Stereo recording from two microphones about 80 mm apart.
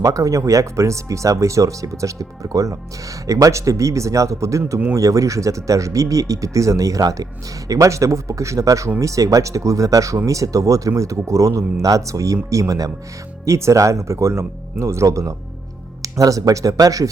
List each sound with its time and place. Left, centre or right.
0.0 s speech: right